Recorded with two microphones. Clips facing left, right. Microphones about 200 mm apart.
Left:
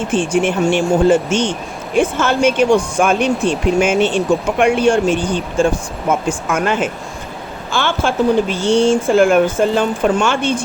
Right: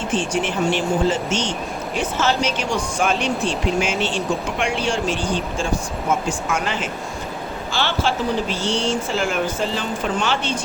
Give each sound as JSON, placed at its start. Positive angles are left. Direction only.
{"t": 0.1, "sound": "speech", "side_deg": 50}